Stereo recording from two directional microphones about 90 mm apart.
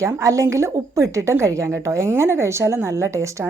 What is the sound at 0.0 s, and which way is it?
A woman's voice, 35° right (ahead or behind).